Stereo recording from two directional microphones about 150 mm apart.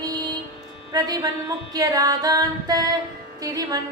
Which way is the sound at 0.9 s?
25° right (ahead or behind).